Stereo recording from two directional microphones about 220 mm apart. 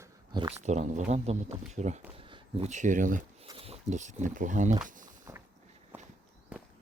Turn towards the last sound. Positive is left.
turn(degrees=-10)  # may be behind; listen again after turning